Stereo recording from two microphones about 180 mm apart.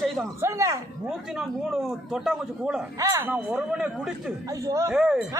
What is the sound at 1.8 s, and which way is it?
A man's voice, 5° right (ahead or behind).